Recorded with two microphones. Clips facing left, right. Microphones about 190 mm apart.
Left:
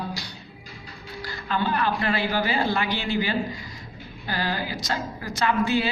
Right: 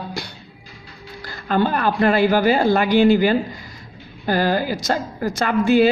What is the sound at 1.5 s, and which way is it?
A woman's voice, 50° right (ahead or behind).